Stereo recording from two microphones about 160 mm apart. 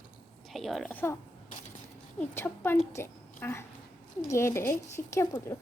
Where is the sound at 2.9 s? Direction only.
15° left (ahead or behind).